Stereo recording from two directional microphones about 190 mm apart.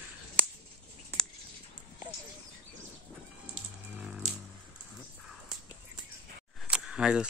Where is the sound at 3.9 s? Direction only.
5° right (ahead or behind).